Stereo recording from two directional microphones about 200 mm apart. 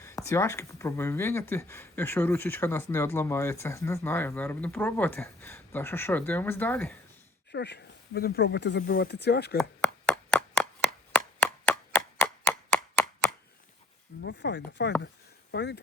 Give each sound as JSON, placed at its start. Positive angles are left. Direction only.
{"t": 0.0, "sound": "speech", "side_deg": 15}
{"t": 7.5, "sound": "speech", "side_deg": 55}
{"t": 11.3, "sound": "a sound", "side_deg": 10}
{"t": 12.2, "sound": "chop", "side_deg": 10}
{"t": 14.2, "sound": "chopping", "side_deg": 60}
{"t": 15.5, "sound": "speech", "side_deg": 60}